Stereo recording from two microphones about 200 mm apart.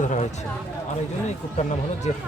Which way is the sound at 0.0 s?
40° left (ahead or behind).